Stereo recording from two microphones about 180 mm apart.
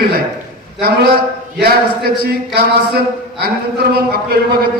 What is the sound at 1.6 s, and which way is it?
Speech, 60° right (ahead or behind).